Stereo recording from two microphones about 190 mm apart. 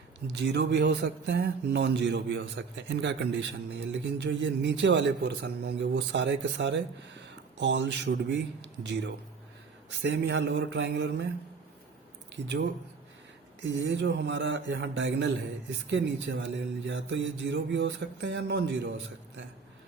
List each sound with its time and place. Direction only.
0.3 s speech: 65° right (ahead or behind)
13.6 s speech: 70° right (ahead or behind)